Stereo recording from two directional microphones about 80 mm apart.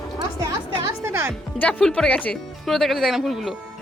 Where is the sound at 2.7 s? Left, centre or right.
Centre.